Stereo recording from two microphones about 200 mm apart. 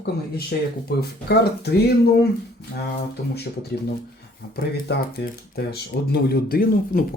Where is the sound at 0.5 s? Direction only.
50° left (ahead or behind).